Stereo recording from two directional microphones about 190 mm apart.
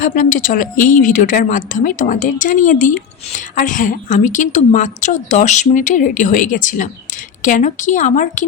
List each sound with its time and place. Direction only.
0.0 s a woman's voice: 45° left (ahead or behind)